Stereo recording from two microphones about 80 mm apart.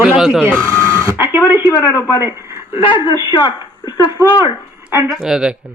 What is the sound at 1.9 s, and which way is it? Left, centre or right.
Speech, left.